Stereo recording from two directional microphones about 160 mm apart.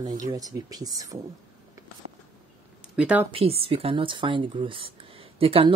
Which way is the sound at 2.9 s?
10° right (ahead or behind).